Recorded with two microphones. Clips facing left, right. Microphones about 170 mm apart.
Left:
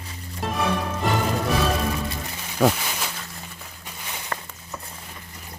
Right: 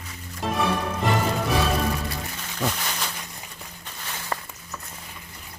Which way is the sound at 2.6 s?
70° left (ahead or behind).